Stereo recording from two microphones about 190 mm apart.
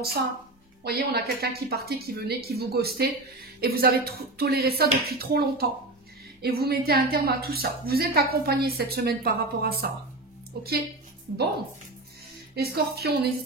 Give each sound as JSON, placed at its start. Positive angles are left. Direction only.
{"t": 0.0, "sound": "a woman's voice", "side_deg": -55}
{"t": 12.5, "sound": "a woman's voice", "side_deg": -55}